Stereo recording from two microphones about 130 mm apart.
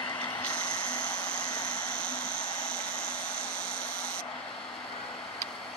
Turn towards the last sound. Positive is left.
turn(degrees=10)  # may be behind; listen again after turning